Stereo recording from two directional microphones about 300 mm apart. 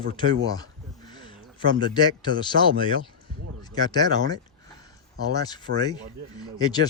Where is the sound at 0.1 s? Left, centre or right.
Centre.